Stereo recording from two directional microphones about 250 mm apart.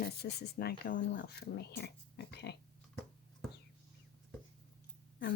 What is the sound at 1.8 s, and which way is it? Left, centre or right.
Pig, left.